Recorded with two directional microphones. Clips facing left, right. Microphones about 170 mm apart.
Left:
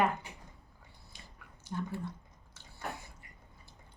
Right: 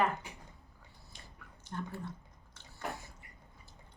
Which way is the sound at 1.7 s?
5° left (ahead or behind).